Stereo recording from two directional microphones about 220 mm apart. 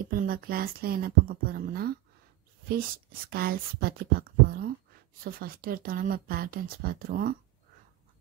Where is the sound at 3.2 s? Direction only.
45° right (ahead or behind).